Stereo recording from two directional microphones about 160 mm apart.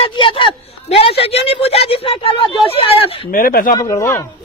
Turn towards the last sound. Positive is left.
turn(degrees=15)  # may be behind; listen again after turning